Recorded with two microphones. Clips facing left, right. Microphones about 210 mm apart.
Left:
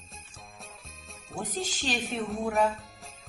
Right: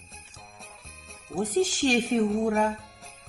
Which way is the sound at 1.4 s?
50° right (ahead or behind).